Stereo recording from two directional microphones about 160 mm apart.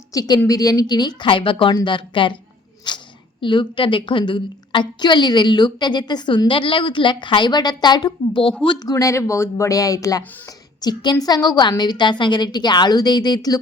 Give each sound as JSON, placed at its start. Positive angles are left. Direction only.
{"t": 0.1, "sound": "a woman's voice", "side_deg": 20}
{"t": 2.9, "sound": "a sound", "side_deg": 30}
{"t": 3.4, "sound": "a woman's voice", "side_deg": 30}